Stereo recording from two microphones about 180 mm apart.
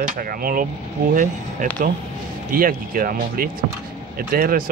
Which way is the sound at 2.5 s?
50° right (ahead or behind).